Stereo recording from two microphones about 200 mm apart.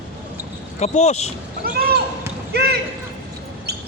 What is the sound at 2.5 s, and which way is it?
Basketball bounce, 55° right (ahead or behind).